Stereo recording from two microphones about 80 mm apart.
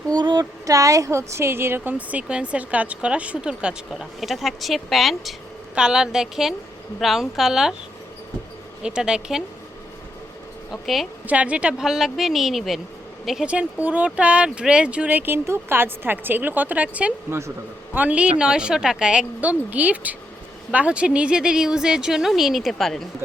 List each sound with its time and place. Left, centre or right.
0.1 s speech: right
0.6 s speech: right; by 4.0 s centre
4.2 s a woman's voice: centre
8.8 s speech: centre
10.7 s a woman's voice: centre
11.3 s a woman's voice: centre
13.5 s speech: centre